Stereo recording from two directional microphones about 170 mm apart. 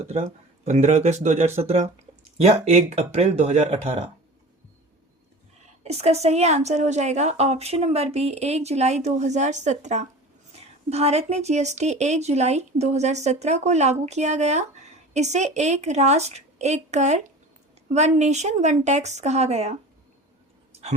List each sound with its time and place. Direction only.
0.0 s a woman's voice: 40° right (ahead or behind)
5.8 s a woman's voice: 40° right (ahead or behind)